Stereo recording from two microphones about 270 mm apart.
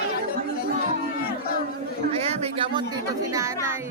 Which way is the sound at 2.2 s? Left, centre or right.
Centre.